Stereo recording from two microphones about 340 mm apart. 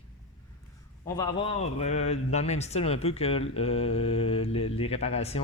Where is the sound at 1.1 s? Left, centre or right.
Centre.